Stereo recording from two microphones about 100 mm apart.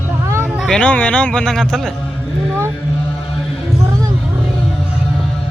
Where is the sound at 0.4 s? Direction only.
5° right (ahead or behind).